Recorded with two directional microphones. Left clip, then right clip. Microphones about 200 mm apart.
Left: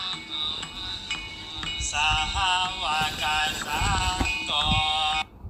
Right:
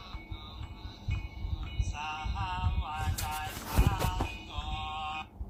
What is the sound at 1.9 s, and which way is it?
Music, 50° left (ahead or behind).